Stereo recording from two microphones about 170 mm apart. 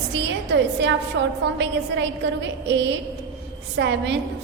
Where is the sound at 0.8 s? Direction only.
90° right.